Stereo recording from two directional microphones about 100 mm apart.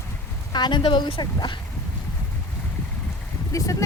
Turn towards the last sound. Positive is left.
turn(degrees=30)  # may be behind; listen again after turning